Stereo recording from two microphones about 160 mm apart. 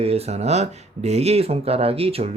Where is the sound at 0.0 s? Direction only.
40° right (ahead or behind).